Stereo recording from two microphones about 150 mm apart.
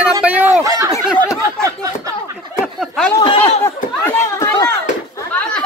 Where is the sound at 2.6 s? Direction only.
Centre (ahead or behind).